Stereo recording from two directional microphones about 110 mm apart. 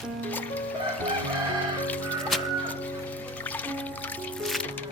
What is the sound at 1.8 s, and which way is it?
Music, 15° left (ahead or behind).